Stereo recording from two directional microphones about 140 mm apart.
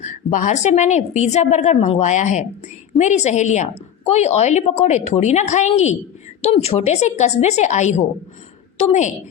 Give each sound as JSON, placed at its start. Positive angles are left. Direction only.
{"t": 0.0, "sound": "a woman's voice", "side_deg": 60}